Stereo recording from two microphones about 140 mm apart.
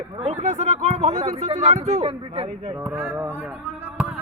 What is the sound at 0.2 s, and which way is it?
Speech, 55° right (ahead or behind).